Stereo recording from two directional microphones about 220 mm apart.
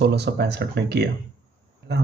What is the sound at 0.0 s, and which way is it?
Speech, 50° right (ahead or behind).